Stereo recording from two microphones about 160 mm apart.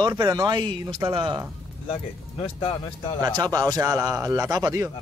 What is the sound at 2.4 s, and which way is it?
Speech, 35° left (ahead or behind).